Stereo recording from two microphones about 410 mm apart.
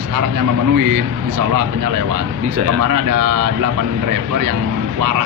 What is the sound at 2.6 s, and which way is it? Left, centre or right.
Speech, right.